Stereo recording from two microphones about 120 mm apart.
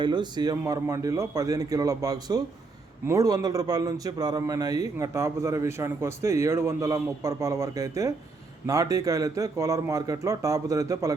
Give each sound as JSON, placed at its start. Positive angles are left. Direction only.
{"t": 0.0, "sound": "speech", "side_deg": -40}
{"t": 0.5, "sound": "a man's voice", "side_deg": -25}